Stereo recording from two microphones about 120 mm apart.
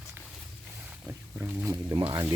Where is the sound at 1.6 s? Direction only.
30° right (ahead or behind).